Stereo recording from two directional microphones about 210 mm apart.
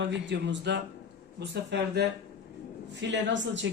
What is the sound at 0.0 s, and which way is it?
Speech, 55° right (ahead or behind).